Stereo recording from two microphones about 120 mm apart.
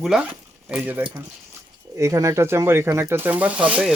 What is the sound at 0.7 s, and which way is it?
Speech, 15° right (ahead or behind).